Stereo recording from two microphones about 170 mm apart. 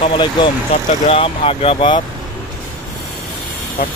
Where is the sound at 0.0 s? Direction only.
30° left (ahead or behind).